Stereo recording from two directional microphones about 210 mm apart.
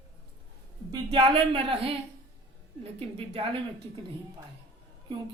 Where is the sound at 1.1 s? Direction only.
25° right (ahead or behind).